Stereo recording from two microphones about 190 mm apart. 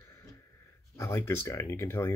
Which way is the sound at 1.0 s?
15° left (ahead or behind).